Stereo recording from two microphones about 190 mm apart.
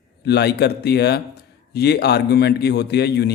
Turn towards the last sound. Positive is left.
turn(degrees=60)  # may be behind; listen again after turning